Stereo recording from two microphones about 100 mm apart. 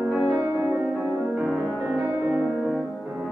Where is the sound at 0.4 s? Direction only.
40° right (ahead or behind).